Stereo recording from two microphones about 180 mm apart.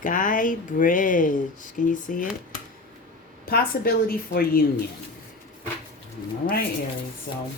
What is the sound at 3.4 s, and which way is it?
A woman's voice, 55° left (ahead or behind).